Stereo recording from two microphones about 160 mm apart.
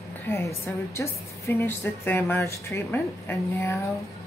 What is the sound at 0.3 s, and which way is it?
Speech, 15° left (ahead or behind).